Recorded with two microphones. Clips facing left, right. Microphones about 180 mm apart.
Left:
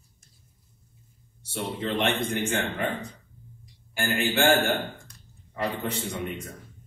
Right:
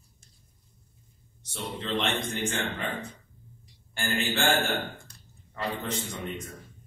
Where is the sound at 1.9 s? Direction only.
60° left (ahead or behind).